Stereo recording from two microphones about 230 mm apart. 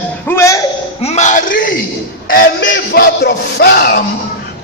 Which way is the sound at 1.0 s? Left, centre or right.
Left.